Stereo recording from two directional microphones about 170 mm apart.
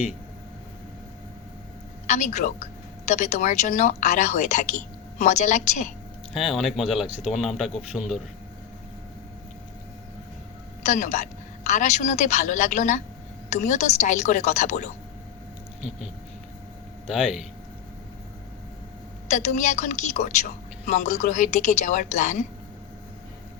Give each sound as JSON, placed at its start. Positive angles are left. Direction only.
{"t": 2.0, "sound": "a woman's voice", "side_deg": 45}
{"t": 6.3, "sound": "speech", "side_deg": 0}
{"t": 7.7, "sound": "a man's voice", "side_deg": 40}
{"t": 10.8, "sound": "a woman's voice", "side_deg": 45}
{"t": 17.1, "sound": "speech", "side_deg": -5}
{"t": 19.3, "sound": "a woman's voice", "side_deg": 45}